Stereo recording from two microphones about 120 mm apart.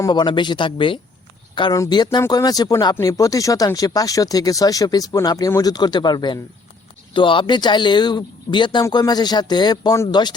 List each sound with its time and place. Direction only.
0.1 s speech: 40° left (ahead or behind)
1.7 s speech: 30° left (ahead or behind)